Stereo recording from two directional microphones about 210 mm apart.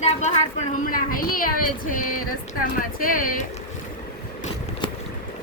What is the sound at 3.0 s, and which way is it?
Speech, 40° left (ahead or behind).